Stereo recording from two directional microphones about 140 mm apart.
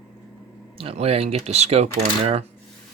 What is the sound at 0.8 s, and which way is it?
Speech, 45° right (ahead or behind).